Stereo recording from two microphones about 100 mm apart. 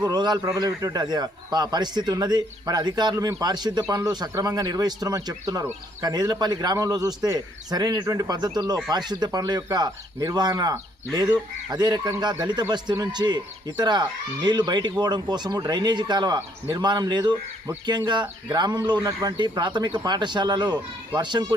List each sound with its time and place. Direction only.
0.0 s speech: 40° right (ahead or behind)